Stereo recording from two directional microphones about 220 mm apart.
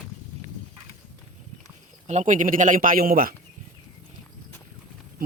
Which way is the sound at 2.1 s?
35° right (ahead or behind).